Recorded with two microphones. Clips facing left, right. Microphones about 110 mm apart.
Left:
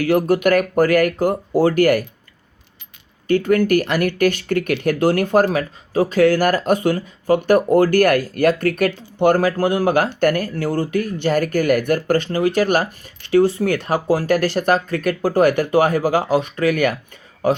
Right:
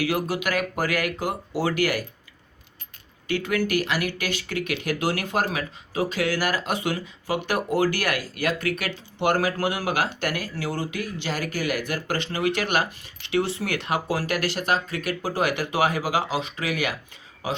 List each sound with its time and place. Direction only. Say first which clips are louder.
0.0 s speech: left 9 dB; 50° left (ahead or behind)
3.2 s speech: left 9 dB; 45° left (ahead or behind)